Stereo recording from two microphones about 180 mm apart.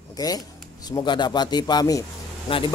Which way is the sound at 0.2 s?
20° left (ahead or behind).